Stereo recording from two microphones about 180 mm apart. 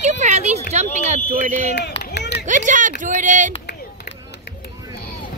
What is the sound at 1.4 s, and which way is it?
Speech, 45° right (ahead or behind).